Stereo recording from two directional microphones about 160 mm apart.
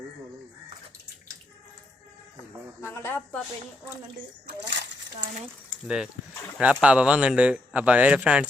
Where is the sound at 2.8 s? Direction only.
15° left (ahead or behind).